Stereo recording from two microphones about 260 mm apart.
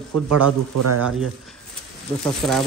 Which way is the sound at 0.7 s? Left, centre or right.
Right.